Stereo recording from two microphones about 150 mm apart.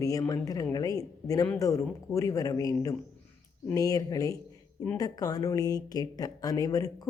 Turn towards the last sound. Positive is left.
turn(degrees=25)  # may be behind; listen again after turning